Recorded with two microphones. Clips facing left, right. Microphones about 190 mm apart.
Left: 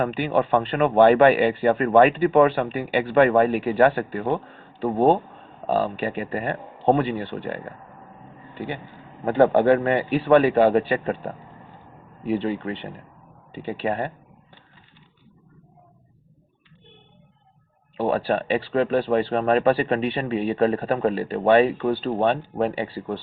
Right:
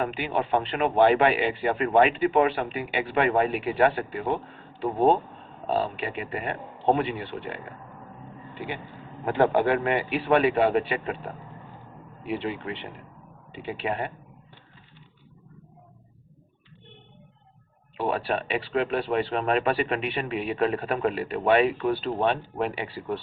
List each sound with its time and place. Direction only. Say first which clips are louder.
0.0 s a man's voice: left 5 dB; 40° left (ahead or behind)
5.7 s a man's voice: left 4 dB; 45° left (ahead or behind)
9.2 s a man's voice: left 5 dB; 35° left (ahead or behind)
18.3 s a man's voice: left 5 dB; 35° left (ahead or behind)